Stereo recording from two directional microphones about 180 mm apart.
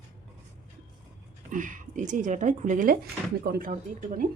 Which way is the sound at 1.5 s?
45° right (ahead or behind).